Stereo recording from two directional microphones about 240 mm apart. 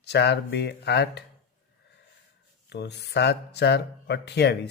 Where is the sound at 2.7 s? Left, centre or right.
Left.